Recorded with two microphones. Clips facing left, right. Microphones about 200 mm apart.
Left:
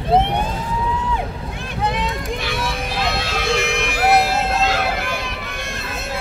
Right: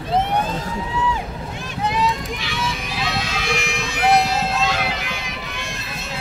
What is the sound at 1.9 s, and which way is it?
Vehicle, 55° left (ahead or behind).